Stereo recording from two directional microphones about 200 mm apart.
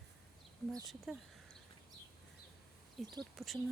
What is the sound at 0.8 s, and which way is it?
Speech, centre (ahead or behind).